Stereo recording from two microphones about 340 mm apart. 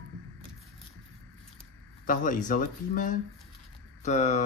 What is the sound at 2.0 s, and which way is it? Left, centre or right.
Speech, left.